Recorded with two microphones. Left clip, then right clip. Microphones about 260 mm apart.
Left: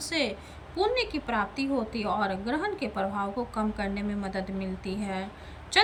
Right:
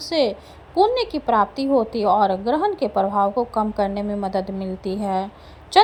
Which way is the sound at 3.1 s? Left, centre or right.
Right.